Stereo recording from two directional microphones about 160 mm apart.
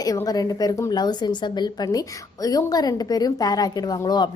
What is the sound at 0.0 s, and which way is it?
Speech, 25° left (ahead or behind).